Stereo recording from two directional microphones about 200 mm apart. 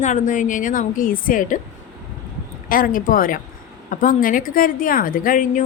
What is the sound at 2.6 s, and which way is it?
A woman's voice, 45° left (ahead or behind).